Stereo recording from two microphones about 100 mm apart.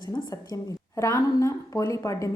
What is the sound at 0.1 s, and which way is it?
A woman's voice, 35° left (ahead or behind).